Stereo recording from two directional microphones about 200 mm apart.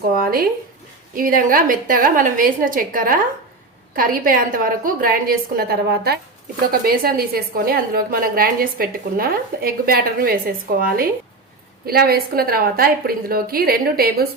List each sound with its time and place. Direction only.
0.2 s a woman's voice: 50° right (ahead or behind)